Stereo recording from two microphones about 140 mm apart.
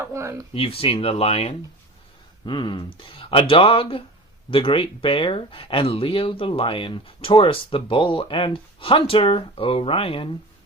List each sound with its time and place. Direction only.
0.0 s speech: 20° right (ahead or behind)
0.5 s speech: 40° left (ahead or behind)
2.5 s speech: 35° left (ahead or behind)